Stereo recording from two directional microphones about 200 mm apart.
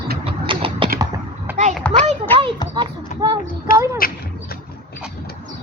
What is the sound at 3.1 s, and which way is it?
Child singing, 40° left (ahead or behind).